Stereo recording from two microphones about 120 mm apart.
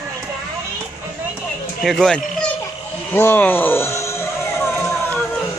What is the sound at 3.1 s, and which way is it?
Speech, 15° left (ahead or behind).